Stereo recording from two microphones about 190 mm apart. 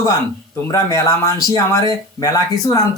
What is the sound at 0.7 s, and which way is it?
Speech, 20° left (ahead or behind).